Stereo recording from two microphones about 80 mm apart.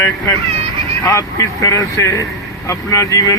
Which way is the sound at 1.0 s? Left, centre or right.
Left.